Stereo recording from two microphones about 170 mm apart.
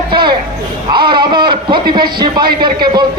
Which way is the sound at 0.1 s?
25° right (ahead or behind).